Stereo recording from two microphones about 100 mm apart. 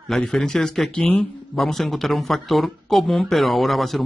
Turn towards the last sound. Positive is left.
turn(degrees=0)  # may be behind; listen again after turning